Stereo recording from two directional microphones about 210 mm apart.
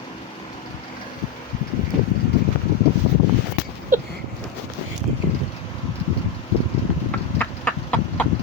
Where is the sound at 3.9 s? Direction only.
40° right (ahead or behind).